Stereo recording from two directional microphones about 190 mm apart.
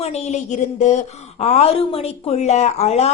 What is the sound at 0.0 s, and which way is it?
A woman's voice, 35° left (ahead or behind).